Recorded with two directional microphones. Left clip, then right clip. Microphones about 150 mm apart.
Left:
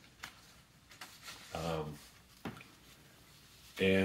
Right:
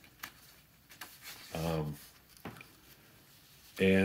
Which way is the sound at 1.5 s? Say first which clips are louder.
Right 2 dB; 90° right.